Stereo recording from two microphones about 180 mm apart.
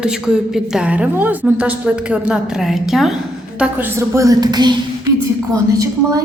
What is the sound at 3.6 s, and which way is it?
A woman's voice, 15° right (ahead or behind).